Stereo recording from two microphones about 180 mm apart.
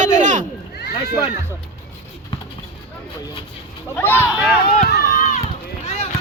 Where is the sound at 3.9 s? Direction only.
10° left (ahead or behind).